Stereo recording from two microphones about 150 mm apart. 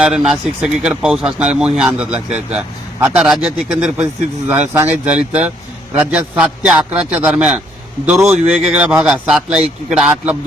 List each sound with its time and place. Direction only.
0.0 s speech: 5° right (ahead or behind)
8.3 s speech: 5° right (ahead or behind)